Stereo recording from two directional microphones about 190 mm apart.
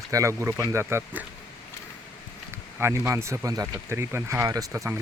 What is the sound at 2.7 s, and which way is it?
Speech, 10° right (ahead or behind).